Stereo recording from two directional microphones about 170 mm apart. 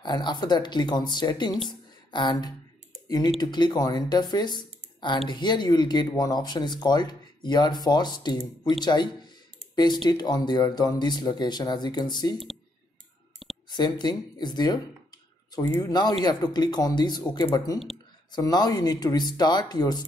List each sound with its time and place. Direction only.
0.0 s speech: 25° left (ahead or behind)
13.7 s speech: 25° left (ahead or behind)